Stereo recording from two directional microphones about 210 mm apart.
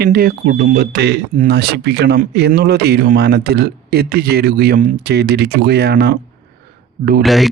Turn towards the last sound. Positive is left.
turn(degrees=0)  # may be behind; listen again after turning